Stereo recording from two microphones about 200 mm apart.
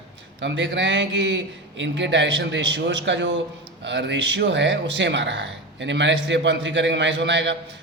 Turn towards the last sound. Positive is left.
turn(degrees=-60)  # may be behind; listen again after turning